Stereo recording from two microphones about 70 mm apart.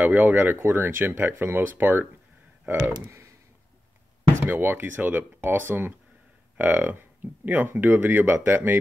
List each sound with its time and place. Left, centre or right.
0.0 s speech: right
4.2 s speech: right